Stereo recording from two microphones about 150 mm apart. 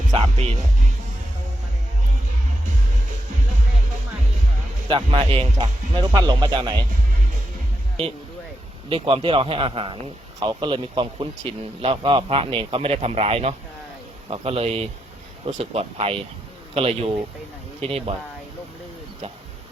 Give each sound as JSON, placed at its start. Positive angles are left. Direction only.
{"t": 4.9, "sound": "speech", "side_deg": -35}
{"t": 8.9, "sound": "speech", "side_deg": -35}